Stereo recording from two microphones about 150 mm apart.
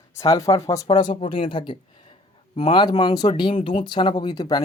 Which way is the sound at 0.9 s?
30° left (ahead or behind).